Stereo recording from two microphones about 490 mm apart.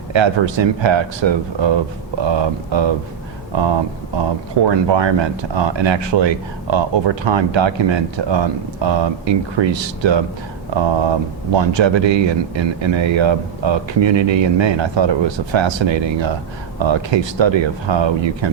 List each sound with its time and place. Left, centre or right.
0.1 s speech: right